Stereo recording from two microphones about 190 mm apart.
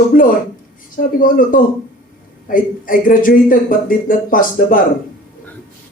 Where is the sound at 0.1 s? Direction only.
50° left (ahead or behind).